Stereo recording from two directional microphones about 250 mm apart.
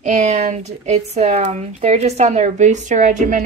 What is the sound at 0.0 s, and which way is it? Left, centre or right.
Speech, right.